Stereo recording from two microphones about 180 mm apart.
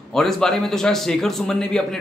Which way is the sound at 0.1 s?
Centre (ahead or behind).